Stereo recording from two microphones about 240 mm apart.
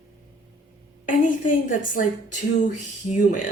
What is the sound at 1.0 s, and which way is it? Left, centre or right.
Speech, left.